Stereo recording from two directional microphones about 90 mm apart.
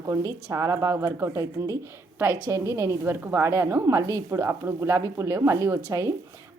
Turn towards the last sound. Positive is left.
turn(degrees=-35)  # may be behind; listen again after turning